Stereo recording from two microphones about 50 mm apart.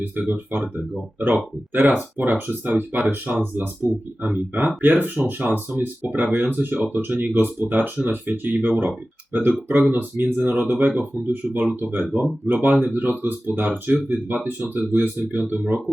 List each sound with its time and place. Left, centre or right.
0.0 s speech: right